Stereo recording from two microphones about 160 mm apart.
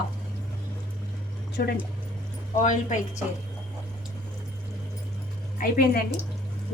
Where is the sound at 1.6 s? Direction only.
75° left (ahead or behind).